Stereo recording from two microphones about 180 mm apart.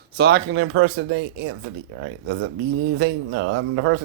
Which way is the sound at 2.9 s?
90° right.